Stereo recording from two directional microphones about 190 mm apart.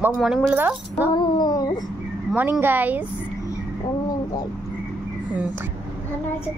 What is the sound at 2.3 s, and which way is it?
Speech, 10° right (ahead or behind).